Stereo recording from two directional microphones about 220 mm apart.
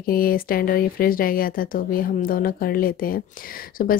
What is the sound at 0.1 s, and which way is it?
Speech, 40° left (ahead or behind).